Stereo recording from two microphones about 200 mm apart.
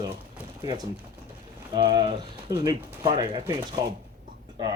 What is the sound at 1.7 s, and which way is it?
Speech, 20° right (ahead or behind).